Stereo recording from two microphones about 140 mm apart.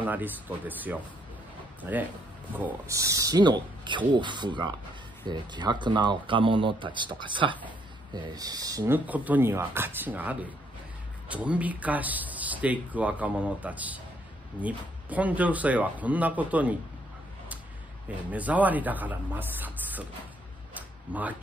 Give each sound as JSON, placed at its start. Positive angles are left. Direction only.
{"t": 0.0, "sound": "speech", "side_deg": -15}
{"t": 8.9, "sound": "speech", "side_deg": -10}
{"t": 18.3, "sound": "speech", "side_deg": -10}
{"t": 20.7, "sound": "a sound", "side_deg": -10}